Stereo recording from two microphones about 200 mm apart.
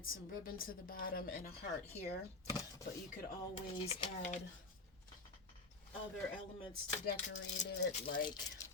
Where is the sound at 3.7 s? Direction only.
30° left (ahead or behind).